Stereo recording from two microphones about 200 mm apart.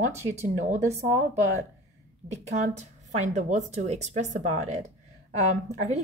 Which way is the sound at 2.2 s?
35° right (ahead or behind).